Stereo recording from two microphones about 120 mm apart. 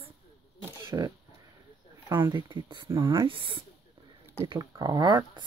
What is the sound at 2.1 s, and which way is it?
Speech, 40° right (ahead or behind).